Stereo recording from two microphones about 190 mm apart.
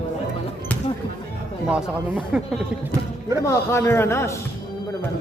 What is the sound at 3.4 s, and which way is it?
A man's voice, 15° left (ahead or behind).